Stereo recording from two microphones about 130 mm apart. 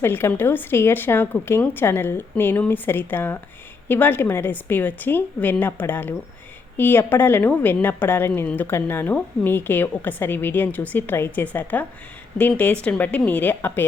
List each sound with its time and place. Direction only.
0.0 s a woman's voice: 15° left (ahead or behind)